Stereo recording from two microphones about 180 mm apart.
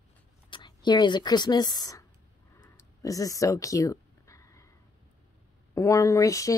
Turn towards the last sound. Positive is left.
turn(degrees=20)  # may be behind; listen again after turning